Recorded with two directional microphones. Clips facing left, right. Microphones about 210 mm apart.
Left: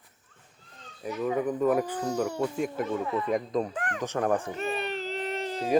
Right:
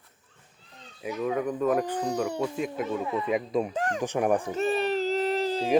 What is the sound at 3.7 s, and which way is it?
Speech, 25° right (ahead or behind).